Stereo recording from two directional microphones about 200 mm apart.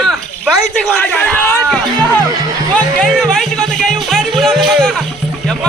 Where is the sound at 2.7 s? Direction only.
5° left (ahead or behind).